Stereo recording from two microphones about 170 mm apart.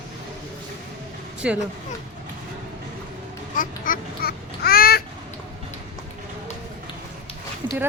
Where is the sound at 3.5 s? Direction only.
55° left (ahead or behind).